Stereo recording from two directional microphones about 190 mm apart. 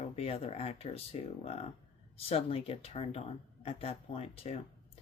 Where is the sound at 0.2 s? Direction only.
30° left (ahead or behind).